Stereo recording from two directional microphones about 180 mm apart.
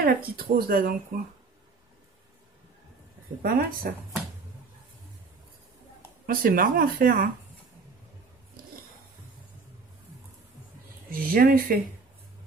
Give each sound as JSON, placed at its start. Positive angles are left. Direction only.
{"t": 0.0, "sound": "speech", "side_deg": -55}
{"t": 3.4, "sound": "speech", "side_deg": -55}
{"t": 6.2, "sound": "speech", "side_deg": -50}
{"t": 11.1, "sound": "speech", "side_deg": -55}